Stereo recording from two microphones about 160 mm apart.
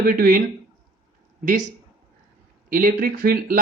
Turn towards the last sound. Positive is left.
turn(degrees=-65)  # may be behind; listen again after turning